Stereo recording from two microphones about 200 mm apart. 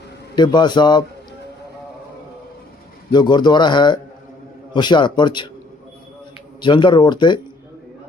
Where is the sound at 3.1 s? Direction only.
20° left (ahead or behind).